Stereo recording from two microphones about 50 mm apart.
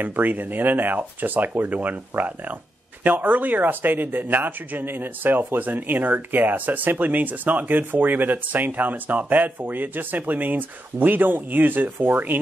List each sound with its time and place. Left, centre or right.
0.0 s speech: right